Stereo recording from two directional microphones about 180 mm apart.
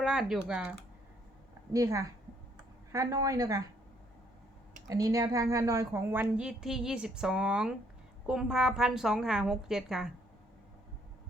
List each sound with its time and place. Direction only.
0.0 s a woman's voice: centre (ahead or behind)
1.7 s a woman's voice: 15° right (ahead or behind)
4.9 s a woman's voice: 20° right (ahead or behind); by 10.1 s 5° right (ahead or behind)